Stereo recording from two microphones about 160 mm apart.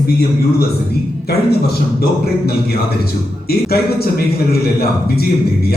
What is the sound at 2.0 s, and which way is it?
A man's voice, 70° left (ahead or behind).